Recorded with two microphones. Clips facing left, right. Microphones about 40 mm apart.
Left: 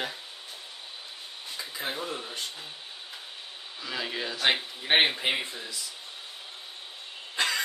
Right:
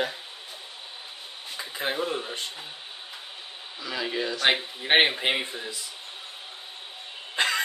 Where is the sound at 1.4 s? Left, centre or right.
Right.